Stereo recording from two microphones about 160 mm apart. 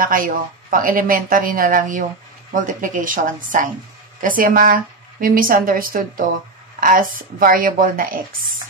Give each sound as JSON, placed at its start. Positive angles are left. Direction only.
{"t": 0.0, "sound": "speech", "side_deg": -60}